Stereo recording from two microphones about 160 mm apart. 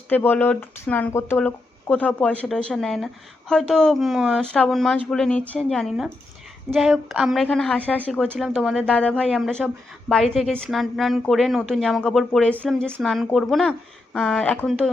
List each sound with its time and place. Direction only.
0.1 s a woman's voice: 10° left (ahead or behind)
8.9 s a woman's voice: 5° left (ahead or behind)